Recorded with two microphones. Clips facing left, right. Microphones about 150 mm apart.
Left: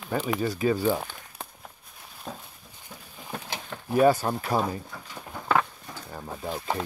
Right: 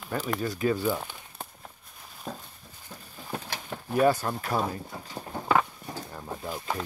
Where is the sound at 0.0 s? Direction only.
Centre (ahead or behind).